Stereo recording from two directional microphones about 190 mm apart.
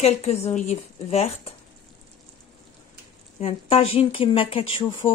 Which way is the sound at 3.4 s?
30° left (ahead or behind).